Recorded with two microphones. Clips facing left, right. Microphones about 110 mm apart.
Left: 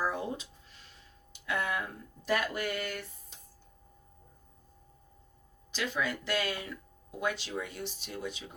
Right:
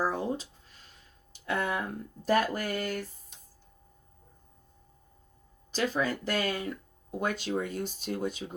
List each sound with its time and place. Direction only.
0.0 s a sound: 35° right (ahead or behind)
1.3 s speech: 35° right (ahead or behind)
5.7 s speech: 40° right (ahead or behind)